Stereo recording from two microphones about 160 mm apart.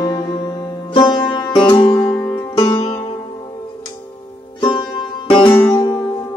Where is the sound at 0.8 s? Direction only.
30° left (ahead or behind).